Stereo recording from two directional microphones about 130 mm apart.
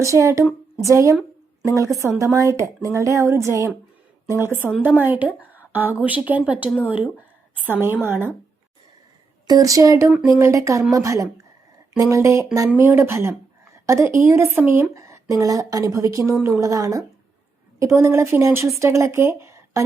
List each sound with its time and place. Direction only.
0.0 s a woman's voice: 25° right (ahead or behind)
9.5 s a woman's voice: 25° right (ahead or behind)